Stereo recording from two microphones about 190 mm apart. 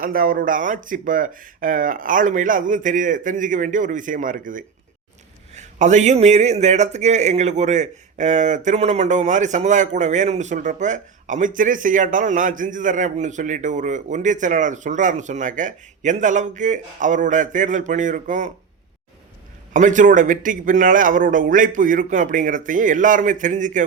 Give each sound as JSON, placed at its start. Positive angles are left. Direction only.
{"t": 0.0, "sound": "speech", "side_deg": -45}
{"t": 19.7, "sound": "speech", "side_deg": -40}